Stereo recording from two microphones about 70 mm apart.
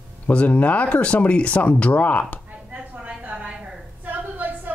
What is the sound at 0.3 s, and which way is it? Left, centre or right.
Speech, centre.